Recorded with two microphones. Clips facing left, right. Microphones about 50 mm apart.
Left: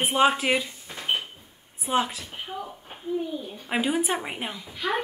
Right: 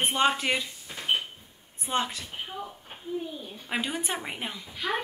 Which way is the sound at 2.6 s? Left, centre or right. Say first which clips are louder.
Left 2 dB; centre.